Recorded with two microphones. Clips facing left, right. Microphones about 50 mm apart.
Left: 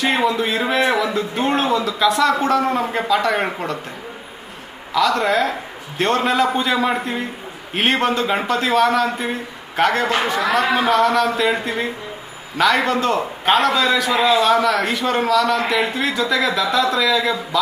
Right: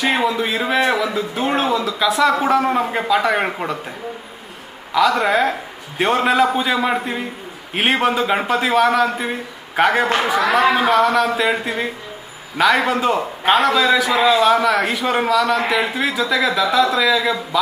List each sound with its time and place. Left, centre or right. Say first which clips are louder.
0.0 s speech: even; centre
4.9 s a man's voice: right 1 dB; centre